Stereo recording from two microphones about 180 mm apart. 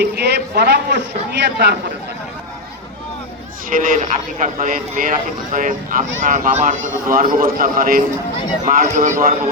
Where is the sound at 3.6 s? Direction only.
50° right (ahead or behind).